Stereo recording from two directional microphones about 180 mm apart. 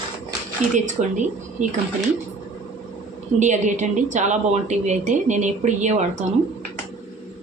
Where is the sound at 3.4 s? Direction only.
40° right (ahead or behind).